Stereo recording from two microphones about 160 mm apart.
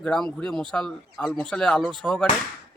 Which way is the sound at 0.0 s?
5° left (ahead or behind).